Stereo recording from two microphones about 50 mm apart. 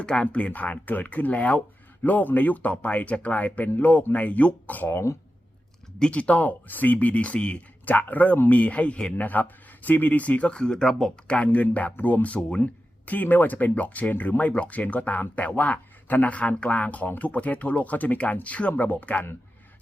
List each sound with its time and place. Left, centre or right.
0.0 s speech: left
4.9 s speech: left
6.0 s speech: left
7.9 s speech: left
9.1 s speech: left
10.5 s speech: centre
11.4 s speech: left